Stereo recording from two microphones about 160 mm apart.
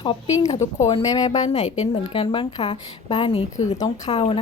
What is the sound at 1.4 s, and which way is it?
Speech, 45° left (ahead or behind).